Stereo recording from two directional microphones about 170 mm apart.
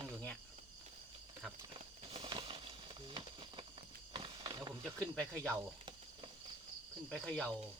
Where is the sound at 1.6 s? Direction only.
35° right (ahead or behind).